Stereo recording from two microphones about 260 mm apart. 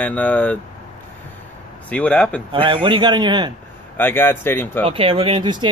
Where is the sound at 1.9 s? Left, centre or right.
Centre.